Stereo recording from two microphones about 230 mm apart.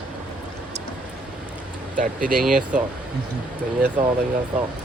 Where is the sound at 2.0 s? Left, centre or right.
Right.